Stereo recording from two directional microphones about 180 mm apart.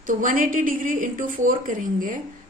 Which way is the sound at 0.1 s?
50° right (ahead or behind).